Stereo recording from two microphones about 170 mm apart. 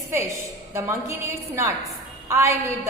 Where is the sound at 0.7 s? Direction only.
15° right (ahead or behind).